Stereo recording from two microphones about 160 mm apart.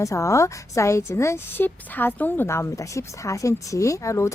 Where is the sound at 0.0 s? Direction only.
20° left (ahead or behind).